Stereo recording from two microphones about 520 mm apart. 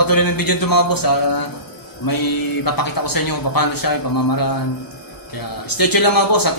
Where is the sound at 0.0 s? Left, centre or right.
Left.